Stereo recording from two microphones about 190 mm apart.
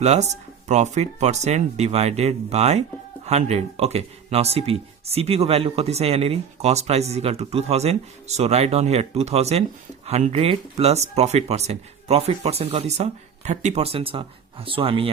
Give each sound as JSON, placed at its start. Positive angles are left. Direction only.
{"t": 0.0, "sound": "speech", "side_deg": -35}